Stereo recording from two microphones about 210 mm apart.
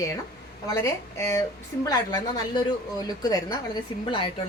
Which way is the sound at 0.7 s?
15° left (ahead or behind).